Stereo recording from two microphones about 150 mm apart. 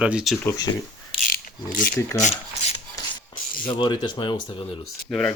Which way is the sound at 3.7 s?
30° left (ahead or behind).